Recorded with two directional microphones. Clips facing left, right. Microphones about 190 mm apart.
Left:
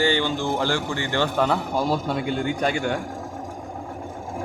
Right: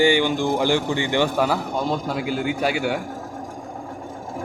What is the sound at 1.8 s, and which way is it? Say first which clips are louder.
A man's voice: left 1 dB; 5° left (ahead or behind).